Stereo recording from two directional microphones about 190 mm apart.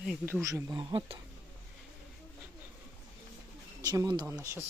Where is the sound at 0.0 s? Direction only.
5° right (ahead or behind); by 1.2 s 30° right (ahead or behind).